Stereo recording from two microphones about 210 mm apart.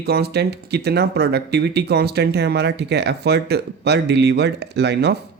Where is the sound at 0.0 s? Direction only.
50° right (ahead or behind).